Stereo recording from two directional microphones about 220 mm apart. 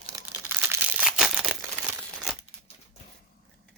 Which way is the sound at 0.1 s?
15° right (ahead or behind).